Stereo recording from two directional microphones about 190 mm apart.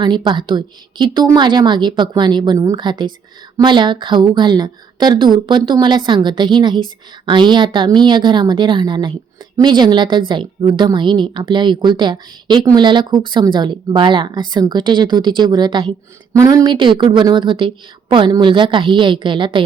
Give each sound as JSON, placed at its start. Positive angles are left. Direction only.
{"t": 0.0, "sound": "a woman's voice", "side_deg": -25}